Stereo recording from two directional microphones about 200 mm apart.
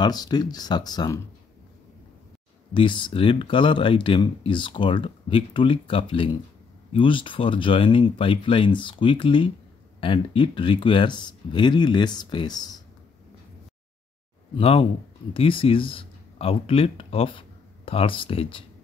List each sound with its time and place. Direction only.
0.0 s speech: 20° left (ahead or behind)
2.7 s speech: 25° left (ahead or behind)
14.6 s speech: 30° left (ahead or behind)